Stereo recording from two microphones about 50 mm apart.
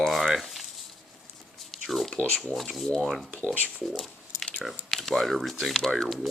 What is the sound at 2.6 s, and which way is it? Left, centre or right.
Speech, centre.